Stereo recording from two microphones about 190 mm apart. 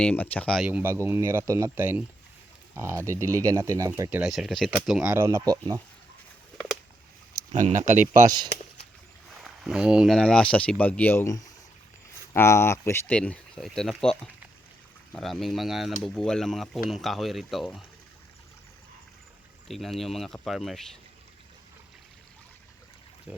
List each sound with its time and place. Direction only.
0.0 s speech: 5° left (ahead or behind)
0.7 s speech: 10° right (ahead or behind)
4.2 s speech: centre (ahead or behind); by 5.8 s 20° right (ahead or behind)
7.5 s speech: 40° right (ahead or behind)
9.4 s speech: 5° right (ahead or behind)
19.6 s speech: centre (ahead or behind)